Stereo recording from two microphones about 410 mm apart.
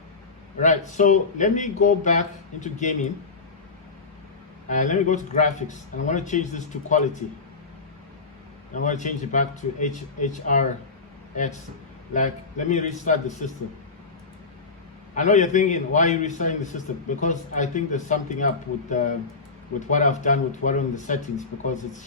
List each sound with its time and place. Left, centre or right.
0.6 s a man's voice: centre
4.7 s a man's voice: centre
8.7 s a man's voice: centre
12.1 s a man's voice: centre
15.1 s a man's voice: centre